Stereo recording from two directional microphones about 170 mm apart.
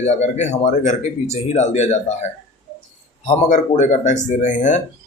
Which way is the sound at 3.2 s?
45° left (ahead or behind).